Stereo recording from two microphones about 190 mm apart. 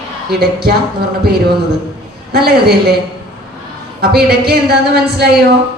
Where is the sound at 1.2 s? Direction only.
55° right (ahead or behind).